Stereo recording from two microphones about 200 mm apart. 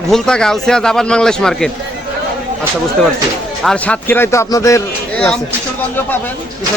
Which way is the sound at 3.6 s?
5° left (ahead or behind).